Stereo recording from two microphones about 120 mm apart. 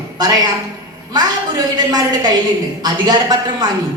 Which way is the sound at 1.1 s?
35° right (ahead or behind).